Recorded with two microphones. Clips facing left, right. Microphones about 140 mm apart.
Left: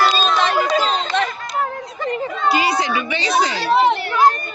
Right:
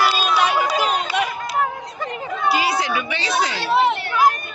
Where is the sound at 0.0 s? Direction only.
5° right (ahead or behind).